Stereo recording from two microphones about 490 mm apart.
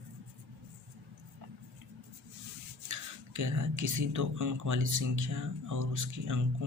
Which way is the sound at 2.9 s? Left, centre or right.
Right.